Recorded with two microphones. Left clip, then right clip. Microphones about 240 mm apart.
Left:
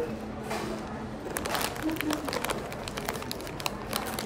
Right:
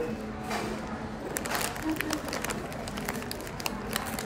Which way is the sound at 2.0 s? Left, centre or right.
Centre.